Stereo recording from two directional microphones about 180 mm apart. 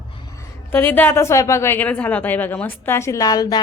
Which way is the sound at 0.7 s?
10° left (ahead or behind).